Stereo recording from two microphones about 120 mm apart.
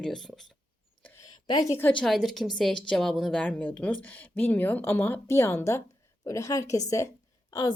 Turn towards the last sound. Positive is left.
turn(degrees=35)  # may be behind; listen again after turning